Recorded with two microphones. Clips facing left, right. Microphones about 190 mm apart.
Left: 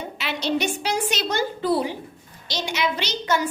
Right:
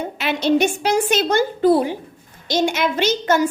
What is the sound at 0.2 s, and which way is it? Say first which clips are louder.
A woman's voice: right 8 dB; 50° right (ahead or behind).